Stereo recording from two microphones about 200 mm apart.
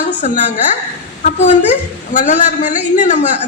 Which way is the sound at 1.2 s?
35° left (ahead or behind).